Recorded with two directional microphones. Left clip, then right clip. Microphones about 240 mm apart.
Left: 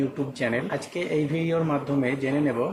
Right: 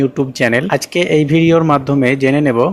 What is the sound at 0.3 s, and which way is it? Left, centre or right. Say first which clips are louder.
Speech: right 13 dB; right.